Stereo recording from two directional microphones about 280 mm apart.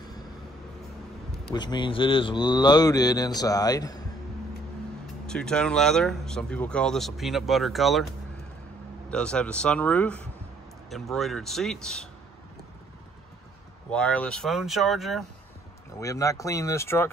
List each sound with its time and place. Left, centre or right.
1.5 s speech: centre
5.2 s speech: centre
9.1 s speech: centre
13.8 s speech: centre
16.0 s speech: centre